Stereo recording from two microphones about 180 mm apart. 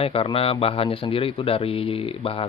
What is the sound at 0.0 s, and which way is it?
A man's voice, 30° left (ahead or behind).